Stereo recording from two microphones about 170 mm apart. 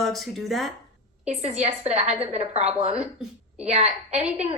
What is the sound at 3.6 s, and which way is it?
Speech, 40° right (ahead or behind).